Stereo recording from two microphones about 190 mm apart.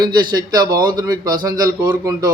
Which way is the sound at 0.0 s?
20° right (ahead or behind).